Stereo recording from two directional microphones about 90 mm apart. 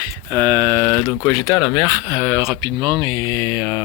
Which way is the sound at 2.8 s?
65° right (ahead or behind).